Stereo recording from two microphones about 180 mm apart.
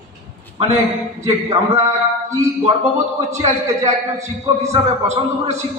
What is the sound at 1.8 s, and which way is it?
A man's voice, 40° right (ahead or behind).